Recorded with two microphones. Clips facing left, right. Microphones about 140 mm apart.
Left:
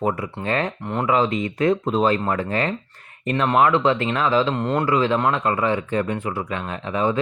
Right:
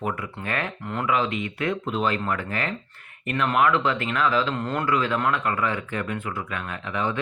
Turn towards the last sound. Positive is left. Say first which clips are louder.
# left 5 dB
turn(degrees=30)  # may be behind; listen again after turning